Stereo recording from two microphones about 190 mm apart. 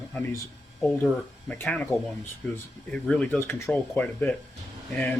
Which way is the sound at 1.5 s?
5° left (ahead or behind).